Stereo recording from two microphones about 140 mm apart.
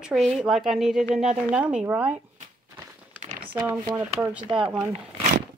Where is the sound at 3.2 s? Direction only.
60° right (ahead or behind).